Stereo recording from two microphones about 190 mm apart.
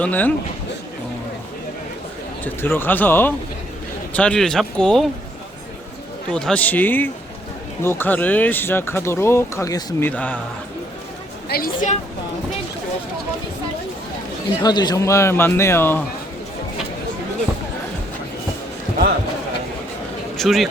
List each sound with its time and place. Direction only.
0.0 s speech: 10° left (ahead or behind)
2.4 s speech: 10° left (ahead or behind)
6.3 s speech: 5° left (ahead or behind)
11.4 s a woman's voice: 50° left (ahead or behind)
14.6 s speech: 20° left (ahead or behind)
20.3 s a man's voice: centre (ahead or behind)